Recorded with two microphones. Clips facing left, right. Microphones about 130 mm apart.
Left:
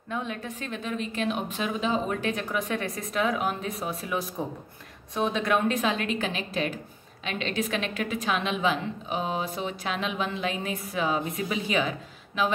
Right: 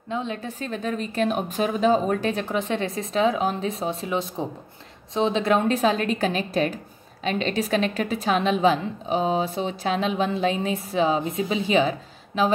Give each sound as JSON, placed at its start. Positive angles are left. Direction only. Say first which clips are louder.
{"t": 0.1, "sound": "a woman's voice", "louder": "right 4 dB", "side_deg": -25}